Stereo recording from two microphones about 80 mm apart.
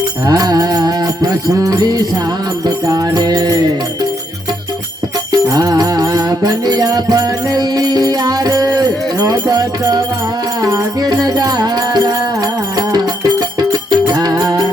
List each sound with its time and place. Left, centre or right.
0.3 s mantra: right
1.6 s music: right
2.6 s music: right
5.3 s music: right